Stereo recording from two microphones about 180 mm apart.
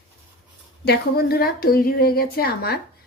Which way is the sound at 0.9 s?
60° left (ahead or behind).